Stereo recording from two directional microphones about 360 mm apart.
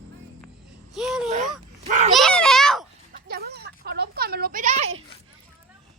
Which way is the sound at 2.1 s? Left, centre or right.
Centre.